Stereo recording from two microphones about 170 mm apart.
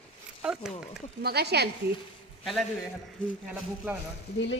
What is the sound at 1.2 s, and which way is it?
Speech, 75° right (ahead or behind).